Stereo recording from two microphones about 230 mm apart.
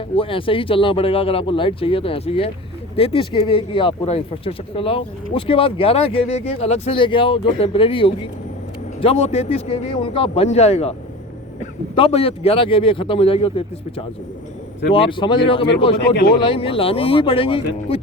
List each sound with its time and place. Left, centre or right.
0.2 s speech: left
11.9 s speech: left